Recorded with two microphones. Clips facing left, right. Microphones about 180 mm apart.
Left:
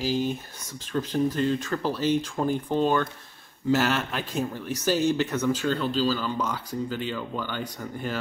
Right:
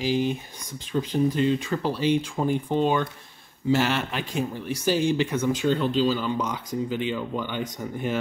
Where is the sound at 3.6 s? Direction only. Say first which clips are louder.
Right 1 dB; 10° right (ahead or behind).